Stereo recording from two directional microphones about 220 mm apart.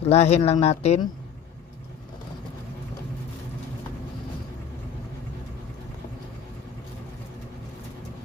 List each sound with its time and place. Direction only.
0.0 s speech: 30° left (ahead or behind)